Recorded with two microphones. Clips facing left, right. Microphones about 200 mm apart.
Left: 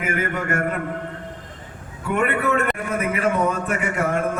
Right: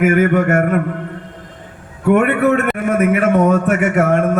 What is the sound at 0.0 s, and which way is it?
Speech, 65° right (ahead or behind).